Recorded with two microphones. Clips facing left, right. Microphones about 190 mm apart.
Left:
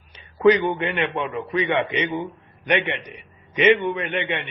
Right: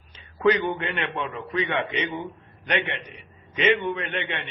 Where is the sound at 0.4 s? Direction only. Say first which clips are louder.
Left 5 dB; 15° left (ahead or behind).